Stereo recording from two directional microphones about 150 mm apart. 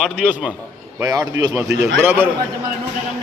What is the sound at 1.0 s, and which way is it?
A man's voice, 25° right (ahead or behind).